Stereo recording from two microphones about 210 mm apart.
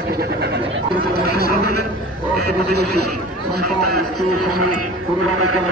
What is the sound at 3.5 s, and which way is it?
Speech, 90° right.